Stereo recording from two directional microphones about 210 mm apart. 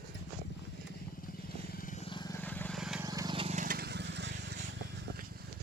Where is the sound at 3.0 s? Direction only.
15° right (ahead or behind); by 5.3 s 55° right (ahead or behind).